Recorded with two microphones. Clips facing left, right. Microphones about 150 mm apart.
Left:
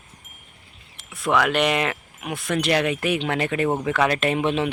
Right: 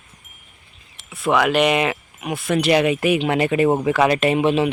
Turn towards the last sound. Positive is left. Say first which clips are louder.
# right 5 dB
turn(degrees=-5)  # may be behind; listen again after turning